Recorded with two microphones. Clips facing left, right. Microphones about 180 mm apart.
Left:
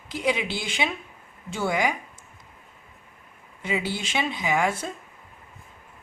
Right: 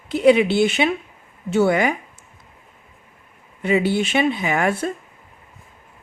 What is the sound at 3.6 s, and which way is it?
Speech, 60° right (ahead or behind).